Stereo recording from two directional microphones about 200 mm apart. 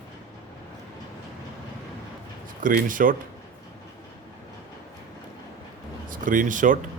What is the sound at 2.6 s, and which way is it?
Speech, 40° right (ahead or behind).